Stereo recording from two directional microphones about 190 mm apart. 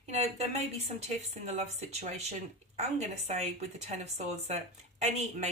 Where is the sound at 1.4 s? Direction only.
35° right (ahead or behind).